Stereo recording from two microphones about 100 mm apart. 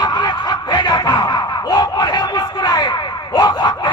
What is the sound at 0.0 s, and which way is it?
Snicker, 45° left (ahead or behind).